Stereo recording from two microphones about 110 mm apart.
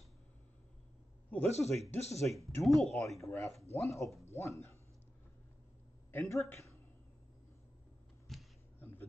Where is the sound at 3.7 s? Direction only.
25° left (ahead or behind).